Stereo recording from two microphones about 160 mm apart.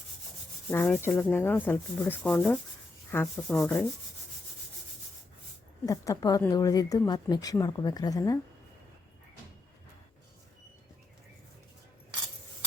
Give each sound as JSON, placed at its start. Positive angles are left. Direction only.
{"t": 0.7, "sound": "rub", "side_deg": 15}
{"t": 5.8, "sound": "speech", "side_deg": 20}